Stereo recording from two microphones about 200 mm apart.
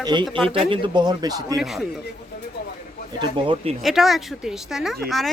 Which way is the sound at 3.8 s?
Centre (ahead or behind).